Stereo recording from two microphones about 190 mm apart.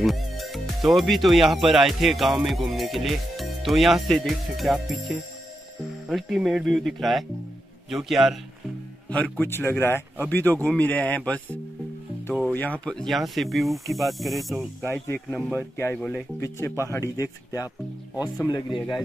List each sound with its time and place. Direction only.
0.0 s speech: centre (ahead or behind); by 18.9 s 20° left (ahead or behind)